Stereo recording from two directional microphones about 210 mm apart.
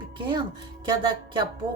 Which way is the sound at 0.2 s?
20° right (ahead or behind).